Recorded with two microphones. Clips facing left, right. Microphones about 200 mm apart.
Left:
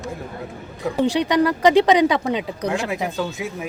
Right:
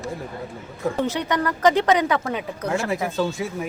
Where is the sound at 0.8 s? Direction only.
15° left (ahead or behind).